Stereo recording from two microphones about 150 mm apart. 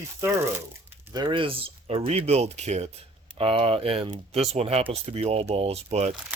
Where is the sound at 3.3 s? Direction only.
40° right (ahead or behind).